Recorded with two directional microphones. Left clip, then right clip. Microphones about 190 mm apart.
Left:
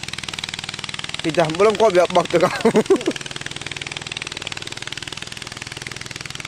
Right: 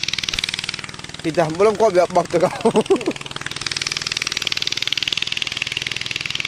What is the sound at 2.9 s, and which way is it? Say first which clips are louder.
Vehicle: even; 65° left (ahead or behind).